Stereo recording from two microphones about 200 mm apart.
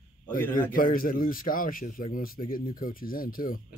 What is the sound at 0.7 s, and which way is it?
Speech, 45° left (ahead or behind).